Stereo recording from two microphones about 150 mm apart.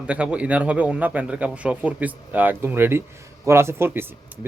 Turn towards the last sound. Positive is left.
turn(degrees=-15)  # may be behind; listen again after turning